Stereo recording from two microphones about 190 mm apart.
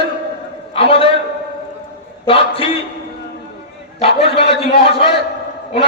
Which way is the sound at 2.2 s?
30° left (ahead or behind).